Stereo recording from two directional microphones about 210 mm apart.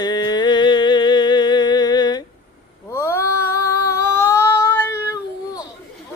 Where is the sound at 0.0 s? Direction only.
20° left (ahead or behind).